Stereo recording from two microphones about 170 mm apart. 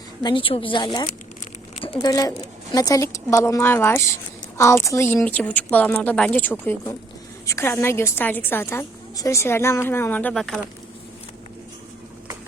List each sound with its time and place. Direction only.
0.2 s a woman's voice: 25° left (ahead or behind)
2.0 s a woman's voice: 20° left (ahead or behind); by 10.6 s 5° left (ahead or behind)